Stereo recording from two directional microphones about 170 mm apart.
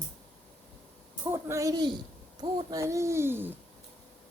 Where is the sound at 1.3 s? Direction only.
15° right (ahead or behind).